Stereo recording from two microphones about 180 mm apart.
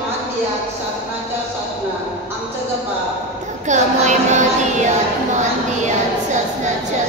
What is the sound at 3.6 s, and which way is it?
Child singing, 40° right (ahead or behind).